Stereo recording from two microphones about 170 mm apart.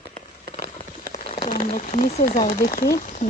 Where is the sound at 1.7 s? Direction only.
45° left (ahead or behind); by 2.8 s 60° left (ahead or behind).